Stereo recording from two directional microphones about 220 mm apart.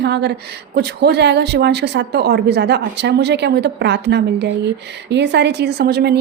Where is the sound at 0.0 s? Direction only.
50° right (ahead or behind).